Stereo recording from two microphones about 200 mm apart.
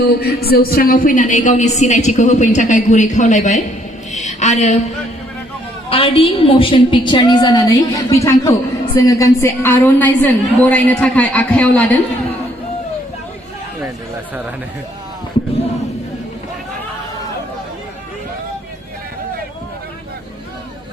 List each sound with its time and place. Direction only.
0.0 s a woman's voice: 50° left (ahead or behind)
4.1 s a sound: 35° left (ahead or behind)
5.9 s a woman's voice: 30° left (ahead or behind); by 11.9 s 5° left (ahead or behind)